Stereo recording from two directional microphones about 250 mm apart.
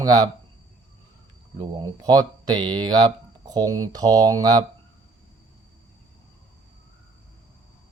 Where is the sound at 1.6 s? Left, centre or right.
Centre.